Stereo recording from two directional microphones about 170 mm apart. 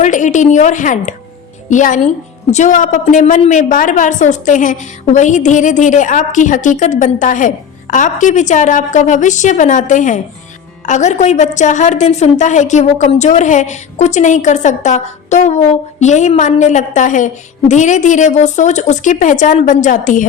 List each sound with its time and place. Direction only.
0.0 s a woman's voice: 45° left (ahead or behind)